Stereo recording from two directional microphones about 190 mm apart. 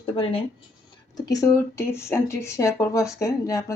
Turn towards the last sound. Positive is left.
turn(degrees=15)  # may be behind; listen again after turning